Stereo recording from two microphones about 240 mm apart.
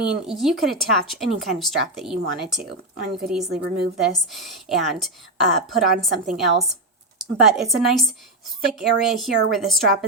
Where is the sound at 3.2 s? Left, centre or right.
Centre.